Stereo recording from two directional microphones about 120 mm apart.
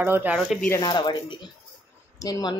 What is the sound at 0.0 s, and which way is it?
Speech, 15° right (ahead or behind).